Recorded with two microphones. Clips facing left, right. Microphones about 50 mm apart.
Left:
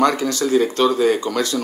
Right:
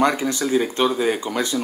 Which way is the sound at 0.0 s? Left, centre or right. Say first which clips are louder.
Left 2 dB; centre.